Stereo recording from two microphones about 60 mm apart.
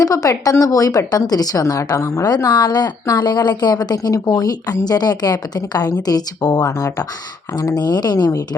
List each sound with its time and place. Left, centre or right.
0.0 s a woman's voice: left
7.6 s speech: left